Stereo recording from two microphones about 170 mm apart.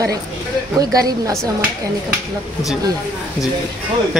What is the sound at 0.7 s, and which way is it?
Speech, 20° right (ahead or behind).